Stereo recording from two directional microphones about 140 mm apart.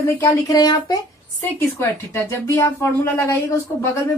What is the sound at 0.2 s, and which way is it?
Speech, 25° left (ahead or behind).